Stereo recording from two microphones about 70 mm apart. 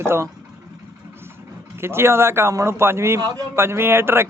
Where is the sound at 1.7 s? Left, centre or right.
Right.